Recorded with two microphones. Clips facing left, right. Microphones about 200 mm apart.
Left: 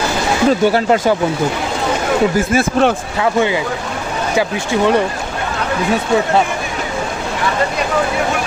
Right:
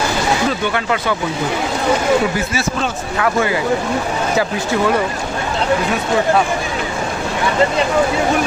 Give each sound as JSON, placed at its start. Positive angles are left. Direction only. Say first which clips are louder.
{"t": 0.7, "sound": "speech", "louder": "left 6 dB", "side_deg": 35}
{"t": 2.3, "sound": "speech", "louder": "left 6 dB", "side_deg": 50}